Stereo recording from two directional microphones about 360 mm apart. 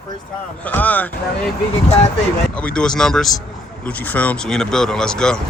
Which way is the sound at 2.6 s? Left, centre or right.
Centre.